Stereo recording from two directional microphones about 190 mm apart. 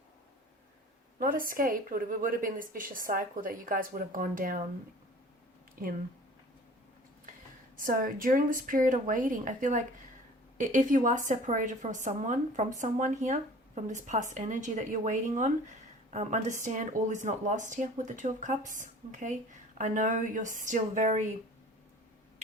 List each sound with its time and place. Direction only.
1.2 s a woman's voice: 45° right (ahead or behind)
5.8 s a woman's voice: 45° right (ahead or behind)
7.8 s a woman's voice: 45° right (ahead or behind)